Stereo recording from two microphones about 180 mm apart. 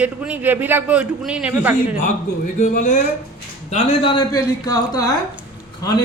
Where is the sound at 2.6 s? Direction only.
40° left (ahead or behind).